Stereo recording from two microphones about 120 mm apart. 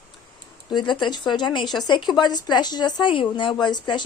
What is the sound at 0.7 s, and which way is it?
Speech, 40° left (ahead or behind).